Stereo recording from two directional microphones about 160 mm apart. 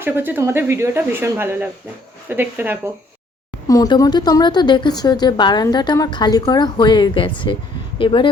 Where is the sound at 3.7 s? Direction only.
20° left (ahead or behind).